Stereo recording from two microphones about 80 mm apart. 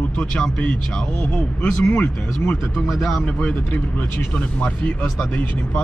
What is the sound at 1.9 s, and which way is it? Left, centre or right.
Speech, left.